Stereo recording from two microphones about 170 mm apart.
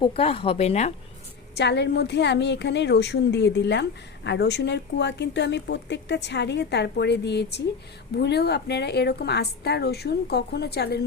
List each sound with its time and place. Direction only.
0.0 s speech: 35° left (ahead or behind)
1.5 s a woman's voice: 85° left; by 11.0 s 70° left (ahead or behind)